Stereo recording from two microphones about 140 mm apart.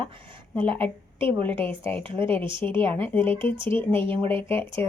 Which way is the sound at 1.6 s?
15° left (ahead or behind).